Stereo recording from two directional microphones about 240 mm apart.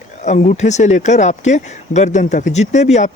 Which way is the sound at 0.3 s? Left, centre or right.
Left.